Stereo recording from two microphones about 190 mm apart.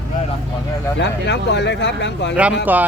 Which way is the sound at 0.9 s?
65° left (ahead or behind).